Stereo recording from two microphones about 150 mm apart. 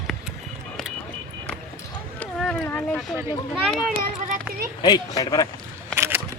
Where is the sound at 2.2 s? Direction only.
5° left (ahead or behind).